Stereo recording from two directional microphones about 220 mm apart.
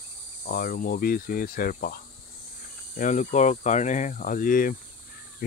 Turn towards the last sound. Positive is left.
turn(degrees=40)  # may be behind; listen again after turning